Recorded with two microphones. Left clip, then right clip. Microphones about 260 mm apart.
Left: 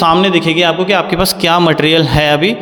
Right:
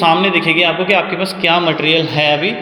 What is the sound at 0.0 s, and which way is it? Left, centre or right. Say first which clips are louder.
A man's voice: left 2 dB; left.